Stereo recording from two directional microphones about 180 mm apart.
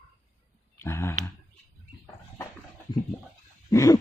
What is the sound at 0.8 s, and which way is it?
Speech, 15° left (ahead or behind).